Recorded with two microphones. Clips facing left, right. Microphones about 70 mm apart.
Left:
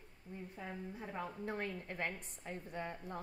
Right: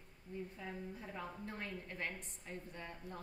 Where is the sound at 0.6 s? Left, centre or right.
Left.